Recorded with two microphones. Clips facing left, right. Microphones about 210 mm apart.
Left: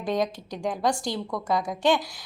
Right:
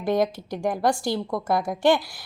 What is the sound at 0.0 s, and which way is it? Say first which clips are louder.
Speech: right 4 dB; 5° right (ahead or behind).